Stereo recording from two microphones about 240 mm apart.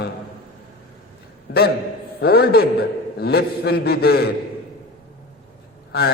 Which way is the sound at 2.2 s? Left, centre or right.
Left.